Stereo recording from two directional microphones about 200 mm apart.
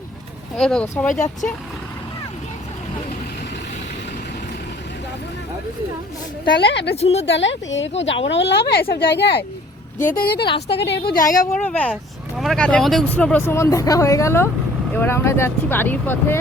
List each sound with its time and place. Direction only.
0.5 s speech: 5° left (ahead or behind)
6.6 s speech: 60° left (ahead or behind)
6.9 s a woman's voice: 30° left (ahead or behind)
7.3 s speech: 65° left (ahead or behind)
10.0 s a woman's voice: 45° left (ahead or behind)
11.6 s speech: 5° left (ahead or behind)